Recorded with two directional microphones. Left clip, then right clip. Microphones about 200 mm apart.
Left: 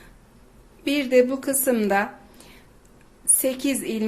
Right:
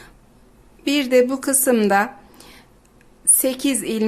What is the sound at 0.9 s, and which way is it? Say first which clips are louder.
A woman's voice: right 3 dB; 15° right (ahead or behind).